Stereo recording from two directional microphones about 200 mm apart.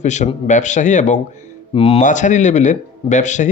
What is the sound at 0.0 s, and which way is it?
A man's voice, 35° left (ahead or behind).